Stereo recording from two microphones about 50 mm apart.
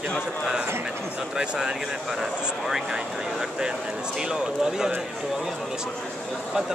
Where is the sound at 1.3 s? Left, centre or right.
Centre.